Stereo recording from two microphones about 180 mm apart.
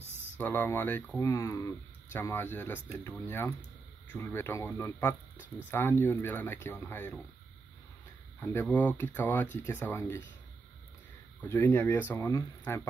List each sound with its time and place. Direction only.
0.4 s speech: 10° left (ahead or behind)
8.4 s speech: 10° left (ahead or behind)
11.4 s speech: 15° left (ahead or behind)